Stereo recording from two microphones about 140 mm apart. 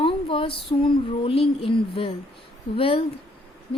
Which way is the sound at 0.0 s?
40° left (ahead or behind).